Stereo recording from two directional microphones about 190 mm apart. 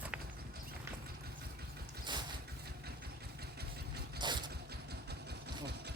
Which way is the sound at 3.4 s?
55° right (ahead or behind).